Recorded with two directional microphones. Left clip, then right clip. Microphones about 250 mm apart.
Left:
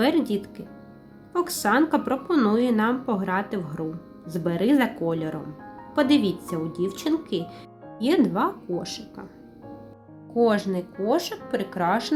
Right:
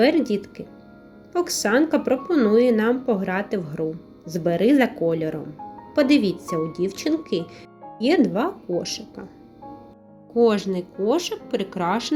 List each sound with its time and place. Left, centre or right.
0.0 s speech: centre
10.3 s speech: centre